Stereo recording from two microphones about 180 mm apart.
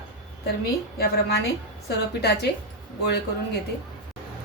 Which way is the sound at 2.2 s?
65° left (ahead or behind).